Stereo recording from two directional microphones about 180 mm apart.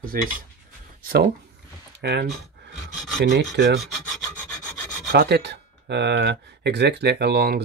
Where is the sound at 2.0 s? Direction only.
65° right (ahead or behind).